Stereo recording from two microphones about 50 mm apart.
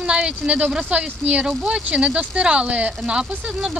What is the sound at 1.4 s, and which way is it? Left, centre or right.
Speech, centre.